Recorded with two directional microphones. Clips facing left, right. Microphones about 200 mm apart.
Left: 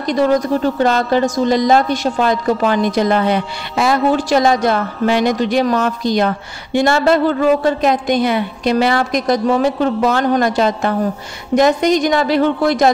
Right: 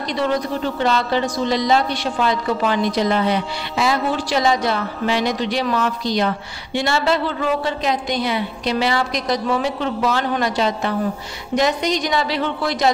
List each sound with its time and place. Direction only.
0.0 s a woman's voice: 45° left (ahead or behind)